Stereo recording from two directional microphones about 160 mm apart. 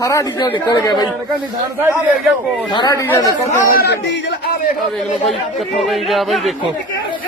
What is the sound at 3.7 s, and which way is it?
Speech, 85° left.